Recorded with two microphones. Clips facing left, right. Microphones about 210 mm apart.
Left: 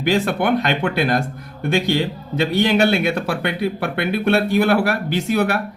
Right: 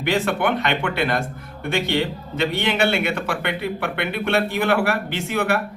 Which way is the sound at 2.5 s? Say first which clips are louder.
Left 6 dB; 40° left (ahead or behind).